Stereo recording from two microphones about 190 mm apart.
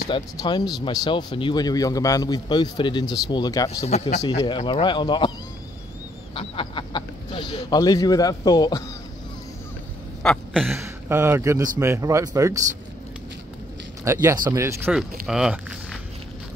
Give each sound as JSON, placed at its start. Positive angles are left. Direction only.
{"t": 0.1, "sound": "speech", "side_deg": 20}
{"t": 3.8, "sound": "speech", "side_deg": 35}
{"t": 6.3, "sound": "speech", "side_deg": 25}
{"t": 10.2, "sound": "a sound", "side_deg": 5}
{"t": 10.8, "sound": "a man's voice", "side_deg": -15}
{"t": 14.0, "sound": "speech", "side_deg": -15}